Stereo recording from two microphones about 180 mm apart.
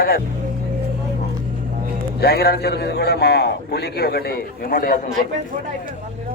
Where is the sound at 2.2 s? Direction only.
60° left (ahead or behind).